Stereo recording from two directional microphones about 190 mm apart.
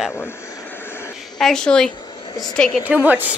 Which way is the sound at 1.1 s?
Centre (ahead or behind).